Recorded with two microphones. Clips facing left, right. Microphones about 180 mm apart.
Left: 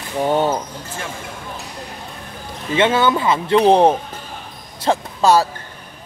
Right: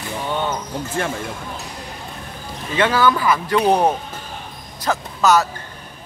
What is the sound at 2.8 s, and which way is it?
Speech, 25° left (ahead or behind).